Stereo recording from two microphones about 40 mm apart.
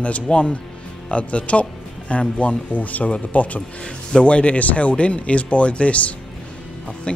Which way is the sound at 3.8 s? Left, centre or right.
Left.